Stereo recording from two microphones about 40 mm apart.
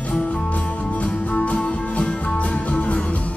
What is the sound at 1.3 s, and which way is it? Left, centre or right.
Music, left.